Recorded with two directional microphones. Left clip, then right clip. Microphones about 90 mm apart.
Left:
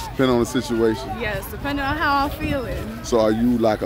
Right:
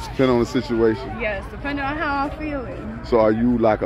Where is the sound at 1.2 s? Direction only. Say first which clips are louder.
Right 2 dB; 55° left (ahead or behind).